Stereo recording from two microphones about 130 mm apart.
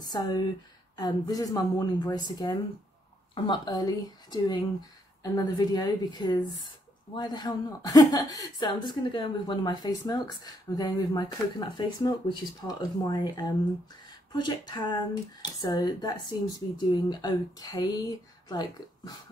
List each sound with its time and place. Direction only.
0.0 s a woman's voice: 35° left (ahead or behind)